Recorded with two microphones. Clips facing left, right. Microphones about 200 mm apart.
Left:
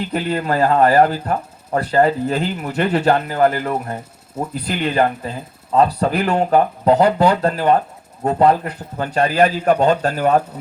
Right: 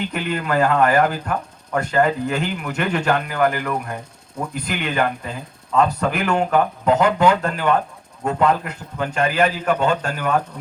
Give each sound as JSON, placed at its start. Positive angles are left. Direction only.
{"t": 0.1, "sound": "speech", "side_deg": 35}